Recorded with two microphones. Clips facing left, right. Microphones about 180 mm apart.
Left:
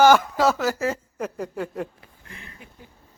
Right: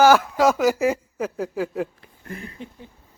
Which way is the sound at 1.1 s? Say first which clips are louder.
Right 3 dB; 5° right (ahead or behind).